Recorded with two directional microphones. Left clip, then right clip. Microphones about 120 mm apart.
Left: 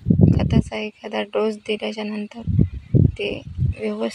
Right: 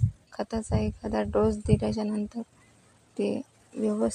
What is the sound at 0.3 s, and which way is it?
A woman's voice, 20° left (ahead or behind).